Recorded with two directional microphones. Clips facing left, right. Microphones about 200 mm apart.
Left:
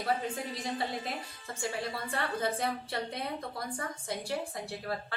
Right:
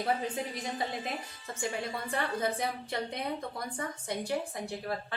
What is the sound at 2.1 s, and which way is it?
A woman's voice, 15° right (ahead or behind).